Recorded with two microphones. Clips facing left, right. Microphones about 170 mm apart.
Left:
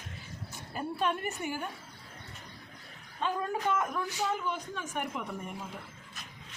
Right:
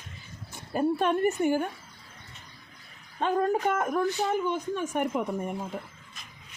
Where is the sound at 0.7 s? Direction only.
50° right (ahead or behind).